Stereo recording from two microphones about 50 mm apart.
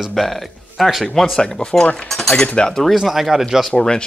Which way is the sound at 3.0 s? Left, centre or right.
Centre.